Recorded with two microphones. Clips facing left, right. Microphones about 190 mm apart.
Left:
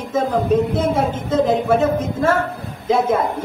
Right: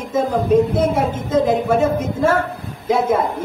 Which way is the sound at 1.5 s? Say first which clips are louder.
Even; 10° right (ahead or behind).